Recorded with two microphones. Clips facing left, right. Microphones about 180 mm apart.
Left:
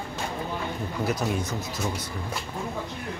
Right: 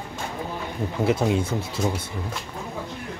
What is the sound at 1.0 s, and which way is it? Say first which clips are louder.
Speech: right 6 dB; 25° right (ahead or behind).